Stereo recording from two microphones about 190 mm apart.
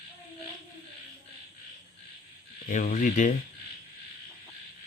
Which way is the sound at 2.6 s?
40° left (ahead or behind).